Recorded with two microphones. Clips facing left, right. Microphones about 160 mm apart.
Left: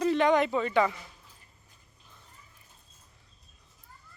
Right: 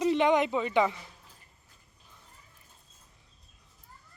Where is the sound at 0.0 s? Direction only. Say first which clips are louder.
Even; 20° right (ahead or behind).